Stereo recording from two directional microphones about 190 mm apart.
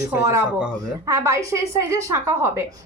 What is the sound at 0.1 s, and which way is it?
A woman's voice, 15° right (ahead or behind).